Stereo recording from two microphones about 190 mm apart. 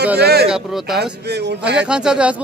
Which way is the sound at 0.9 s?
60° right (ahead or behind).